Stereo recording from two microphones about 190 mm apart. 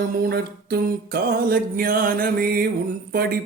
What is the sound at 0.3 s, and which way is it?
Music, 55° right (ahead or behind).